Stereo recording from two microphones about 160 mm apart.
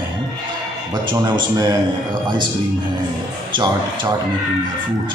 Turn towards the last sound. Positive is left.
turn(degrees=-30)  # may be behind; listen again after turning